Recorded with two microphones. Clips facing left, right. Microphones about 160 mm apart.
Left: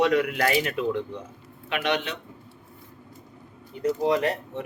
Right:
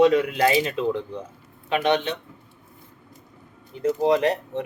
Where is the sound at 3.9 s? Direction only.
30° right (ahead or behind).